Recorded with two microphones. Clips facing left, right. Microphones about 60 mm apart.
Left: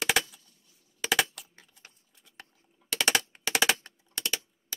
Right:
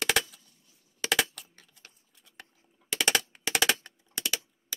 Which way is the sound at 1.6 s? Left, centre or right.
Centre.